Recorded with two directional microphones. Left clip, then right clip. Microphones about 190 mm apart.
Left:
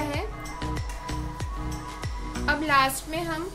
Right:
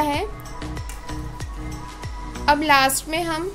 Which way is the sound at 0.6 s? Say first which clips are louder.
Left 1 dB; centre (ahead or behind).